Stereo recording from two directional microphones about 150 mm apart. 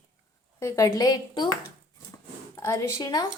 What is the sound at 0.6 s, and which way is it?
Speech, 20° left (ahead or behind).